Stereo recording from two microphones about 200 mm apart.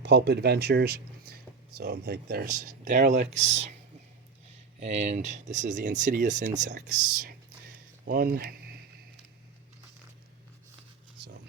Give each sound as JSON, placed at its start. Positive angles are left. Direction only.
{"t": 0.0, "sound": "speech", "side_deg": -60}
{"t": 8.0, "sound": "speech", "side_deg": -45}